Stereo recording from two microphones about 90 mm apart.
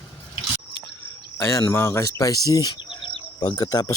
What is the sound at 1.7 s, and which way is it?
Speech, 35° left (ahead or behind).